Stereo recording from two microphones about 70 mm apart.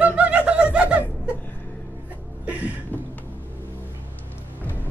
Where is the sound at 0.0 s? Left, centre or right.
Centre.